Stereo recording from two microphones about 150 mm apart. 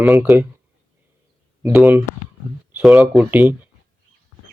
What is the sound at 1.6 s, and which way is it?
Speech, 15° right (ahead or behind).